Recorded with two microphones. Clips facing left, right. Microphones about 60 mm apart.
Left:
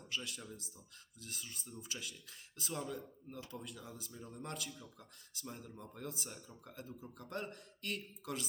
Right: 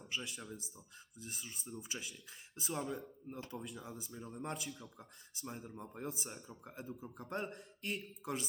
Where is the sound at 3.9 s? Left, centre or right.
Right.